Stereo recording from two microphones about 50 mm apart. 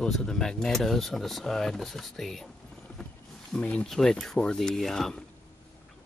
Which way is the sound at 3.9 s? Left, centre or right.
Centre.